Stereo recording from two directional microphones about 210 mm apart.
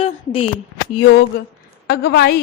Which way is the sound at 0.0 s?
25° left (ahead or behind).